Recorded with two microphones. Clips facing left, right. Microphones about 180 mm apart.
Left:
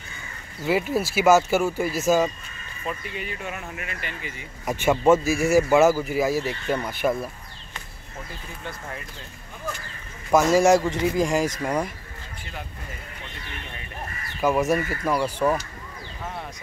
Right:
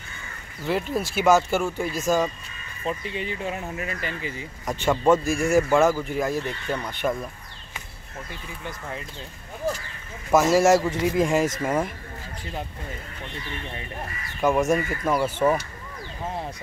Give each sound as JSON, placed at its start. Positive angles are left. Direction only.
{"t": 0.7, "sound": "speech", "side_deg": 5}
{"t": 2.8, "sound": "speech", "side_deg": -25}
{"t": 4.6, "sound": "speech", "side_deg": 5}
{"t": 10.3, "sound": "speech", "side_deg": 0}
{"t": 14.4, "sound": "speech", "side_deg": 0}